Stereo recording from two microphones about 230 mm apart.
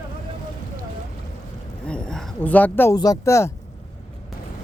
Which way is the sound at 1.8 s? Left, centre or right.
Centre.